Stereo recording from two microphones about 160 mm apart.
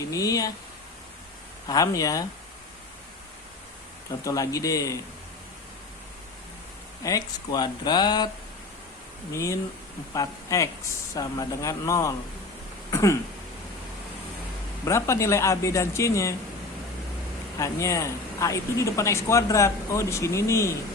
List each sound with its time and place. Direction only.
0.0 s speech: 20° left (ahead or behind)
1.6 s speech: 20° left (ahead or behind)
4.2 s speech: 20° left (ahead or behind)
7.0 s speech: 25° left (ahead or behind)
9.3 s speech: 20° left (ahead or behind)
12.9 s a sound: 15° left (ahead or behind)
14.8 s speech: 20° left (ahead or behind)
17.6 s speech: 20° left (ahead or behind)